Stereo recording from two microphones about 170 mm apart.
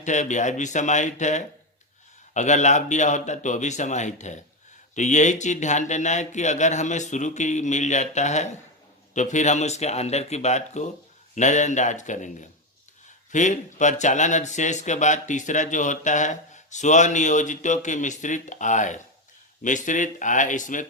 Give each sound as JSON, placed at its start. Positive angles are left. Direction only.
{"t": 0.0, "sound": "speech", "side_deg": 45}